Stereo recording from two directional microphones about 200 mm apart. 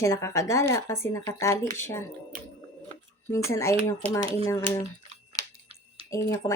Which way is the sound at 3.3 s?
15° left (ahead or behind).